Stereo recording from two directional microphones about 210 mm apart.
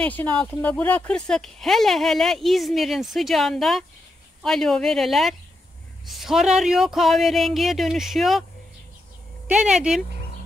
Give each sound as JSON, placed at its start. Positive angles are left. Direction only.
{"t": 0.0, "sound": "speech", "side_deg": 5}
{"t": 9.5, "sound": "speech", "side_deg": -5}